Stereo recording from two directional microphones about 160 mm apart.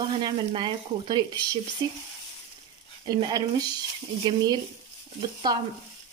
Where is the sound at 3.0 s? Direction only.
25° right (ahead or behind).